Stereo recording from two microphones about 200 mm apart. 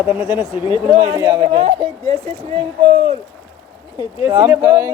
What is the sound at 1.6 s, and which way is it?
Speech, 30° right (ahead or behind).